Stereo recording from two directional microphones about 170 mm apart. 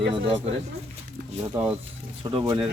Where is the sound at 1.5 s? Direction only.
10° right (ahead or behind).